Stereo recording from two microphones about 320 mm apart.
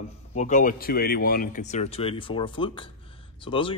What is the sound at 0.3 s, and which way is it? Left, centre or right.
Speech, left.